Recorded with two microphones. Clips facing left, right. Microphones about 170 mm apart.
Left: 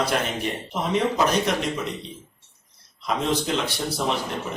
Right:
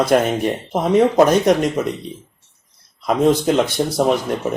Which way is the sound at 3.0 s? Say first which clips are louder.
Right 9 dB; 50° right (ahead or behind).